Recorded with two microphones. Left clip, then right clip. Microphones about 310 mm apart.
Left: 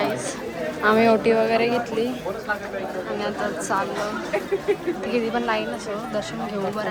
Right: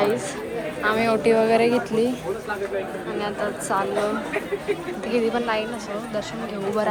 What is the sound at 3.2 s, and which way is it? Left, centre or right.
Speech, centre.